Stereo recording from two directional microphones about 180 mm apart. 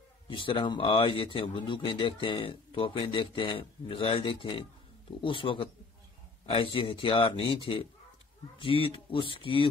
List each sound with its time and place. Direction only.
0.3 s speech: 30° left (ahead or behind)